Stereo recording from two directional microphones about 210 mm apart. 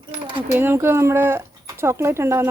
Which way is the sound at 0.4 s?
10° right (ahead or behind).